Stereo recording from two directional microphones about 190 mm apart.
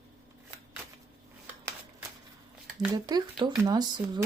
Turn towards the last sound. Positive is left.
turn(degrees=-20)  # may be behind; listen again after turning